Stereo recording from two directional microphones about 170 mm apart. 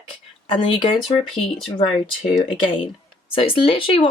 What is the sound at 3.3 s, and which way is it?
Speech, 30° left (ahead or behind).